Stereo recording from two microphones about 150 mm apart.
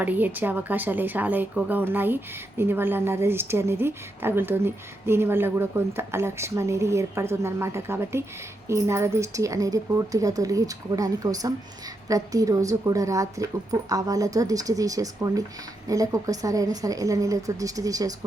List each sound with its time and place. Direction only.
0.0 s a woman's voice: 10° right (ahead or behind)